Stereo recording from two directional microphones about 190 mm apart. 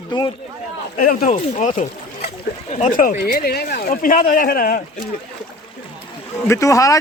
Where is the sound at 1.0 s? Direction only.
45° left (ahead or behind).